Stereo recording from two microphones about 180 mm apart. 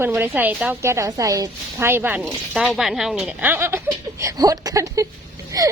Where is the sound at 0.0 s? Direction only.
10° right (ahead or behind).